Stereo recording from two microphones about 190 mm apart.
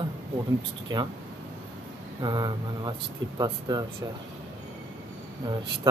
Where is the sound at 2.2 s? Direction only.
20° right (ahead or behind).